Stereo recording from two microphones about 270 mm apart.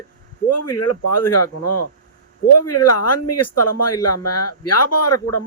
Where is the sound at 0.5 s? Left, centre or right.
Left.